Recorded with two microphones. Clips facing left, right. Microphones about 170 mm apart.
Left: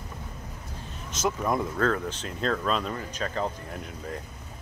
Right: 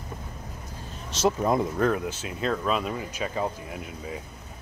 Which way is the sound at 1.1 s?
25° right (ahead or behind).